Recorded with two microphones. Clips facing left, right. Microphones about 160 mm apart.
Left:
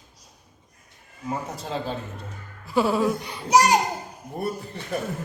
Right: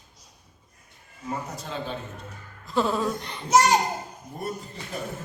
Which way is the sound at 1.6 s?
35° left (ahead or behind).